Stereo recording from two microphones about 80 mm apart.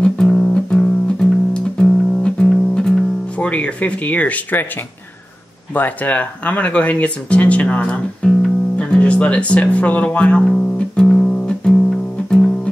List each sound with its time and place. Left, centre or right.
0.0 s music: centre
3.3 s speech: centre
5.8 s speech: left